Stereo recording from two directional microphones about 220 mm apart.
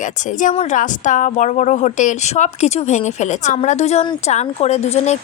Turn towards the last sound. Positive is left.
turn(degrees=30)  # may be behind; listen again after turning